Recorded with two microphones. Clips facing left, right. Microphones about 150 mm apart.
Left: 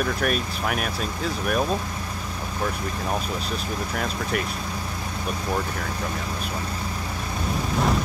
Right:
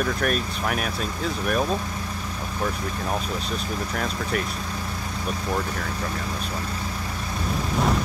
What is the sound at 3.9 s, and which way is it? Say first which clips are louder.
Speech: even; centre (ahead or behind).